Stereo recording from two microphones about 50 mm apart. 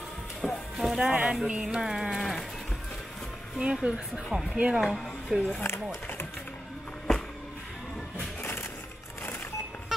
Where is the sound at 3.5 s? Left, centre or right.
Centre.